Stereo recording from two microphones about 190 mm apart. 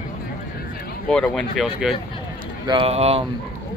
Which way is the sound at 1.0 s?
5° left (ahead or behind).